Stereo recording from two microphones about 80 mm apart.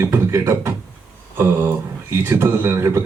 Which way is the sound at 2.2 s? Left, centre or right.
Right.